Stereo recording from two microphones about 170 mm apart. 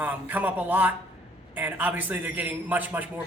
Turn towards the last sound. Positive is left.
turn(degrees=-10)  # may be behind; listen again after turning